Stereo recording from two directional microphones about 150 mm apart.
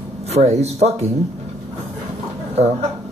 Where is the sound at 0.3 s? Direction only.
45° right (ahead or behind).